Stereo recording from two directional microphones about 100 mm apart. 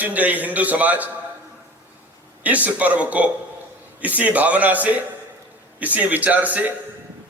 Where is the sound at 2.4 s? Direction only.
15° right (ahead or behind).